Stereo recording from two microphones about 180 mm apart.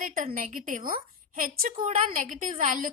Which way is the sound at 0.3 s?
50° right (ahead or behind).